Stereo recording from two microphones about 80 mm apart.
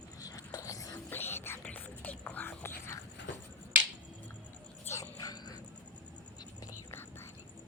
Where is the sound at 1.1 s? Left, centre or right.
Left.